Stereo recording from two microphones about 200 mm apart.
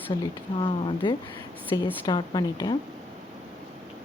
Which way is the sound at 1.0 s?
25° left (ahead or behind).